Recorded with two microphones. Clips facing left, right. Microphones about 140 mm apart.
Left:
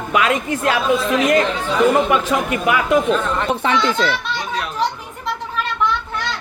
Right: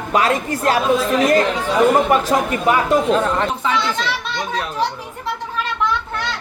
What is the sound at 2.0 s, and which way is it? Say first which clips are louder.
Speech: right 1 dB; 40° right (ahead or behind).